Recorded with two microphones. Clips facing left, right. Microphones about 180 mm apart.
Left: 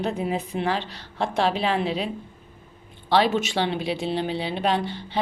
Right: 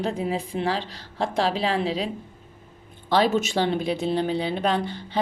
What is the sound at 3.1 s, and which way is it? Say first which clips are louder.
A woman's voice: even; 40° right (ahead or behind).